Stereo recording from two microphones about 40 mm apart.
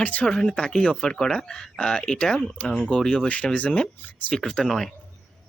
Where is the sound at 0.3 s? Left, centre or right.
Centre.